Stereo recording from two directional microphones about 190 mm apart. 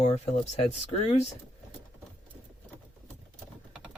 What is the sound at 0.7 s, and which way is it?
Speech, 35° left (ahead or behind).